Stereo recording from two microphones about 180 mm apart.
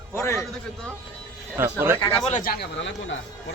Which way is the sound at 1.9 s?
25° left (ahead or behind).